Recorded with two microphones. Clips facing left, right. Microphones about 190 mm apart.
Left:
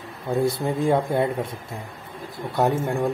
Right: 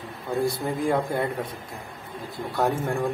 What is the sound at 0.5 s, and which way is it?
Speech, 25° left (ahead or behind).